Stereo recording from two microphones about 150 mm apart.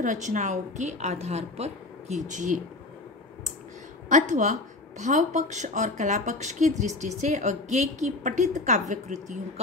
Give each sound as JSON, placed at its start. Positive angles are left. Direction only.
{"t": 0.0, "sound": "a woman's voice", "side_deg": -55}
{"t": 4.1, "sound": "a woman's voice", "side_deg": -55}